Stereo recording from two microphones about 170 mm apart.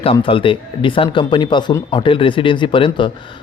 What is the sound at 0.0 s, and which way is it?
Speech, 30° left (ahead or behind).